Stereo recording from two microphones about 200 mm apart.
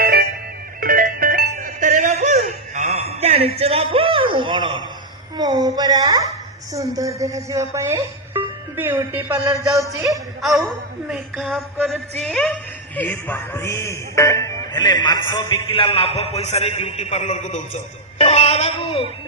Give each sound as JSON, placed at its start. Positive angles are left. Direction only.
{"t": 0.0, "sound": "music", "side_deg": -50}
{"t": 5.4, "sound": "speech", "side_deg": -20}
{"t": 11.1, "sound": "a sound", "side_deg": 0}
{"t": 13.0, "sound": "speech", "side_deg": 10}
{"t": 18.2, "sound": "music", "side_deg": 30}